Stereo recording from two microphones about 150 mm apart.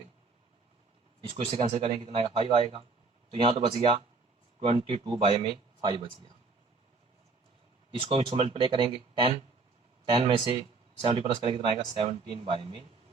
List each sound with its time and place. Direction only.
1.2 s speech: 40° right (ahead or behind)
7.9 s speech: 40° right (ahead or behind)